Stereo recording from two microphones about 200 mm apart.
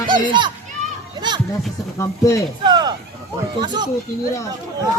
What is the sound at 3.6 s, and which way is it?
Speech, 20° right (ahead or behind).